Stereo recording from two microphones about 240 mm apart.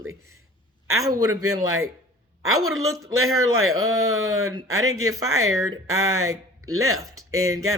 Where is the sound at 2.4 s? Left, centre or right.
Right.